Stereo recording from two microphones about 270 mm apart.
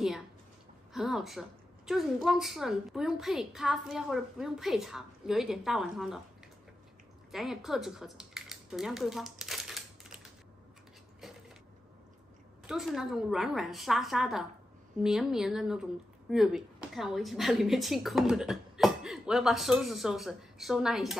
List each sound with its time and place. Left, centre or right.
0.9 s speech: centre
7.2 s a sound: centre
12.6 s speech: centre